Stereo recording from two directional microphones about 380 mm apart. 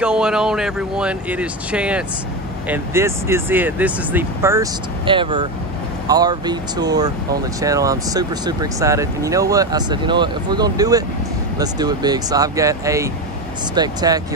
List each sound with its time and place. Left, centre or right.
0.0 s speech: centre